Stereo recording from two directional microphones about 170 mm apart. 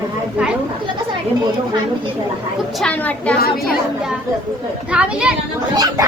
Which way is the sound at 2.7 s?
5° left (ahead or behind).